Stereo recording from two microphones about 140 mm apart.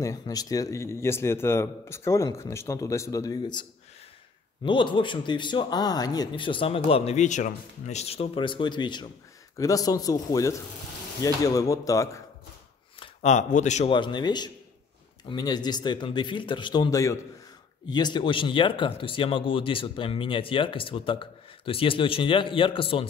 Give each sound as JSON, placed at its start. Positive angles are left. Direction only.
{"t": 0.0, "sound": "a man's voice", "side_deg": 25}
{"t": 4.6, "sound": "a man's voice", "side_deg": 35}
{"t": 13.2, "sound": "speech", "side_deg": 60}
{"t": 13.8, "sound": "speech", "side_deg": 35}